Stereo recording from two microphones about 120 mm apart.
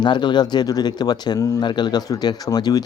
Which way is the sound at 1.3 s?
25° left (ahead or behind).